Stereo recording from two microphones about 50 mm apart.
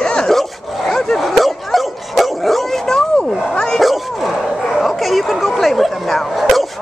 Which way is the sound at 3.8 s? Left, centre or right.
Centre.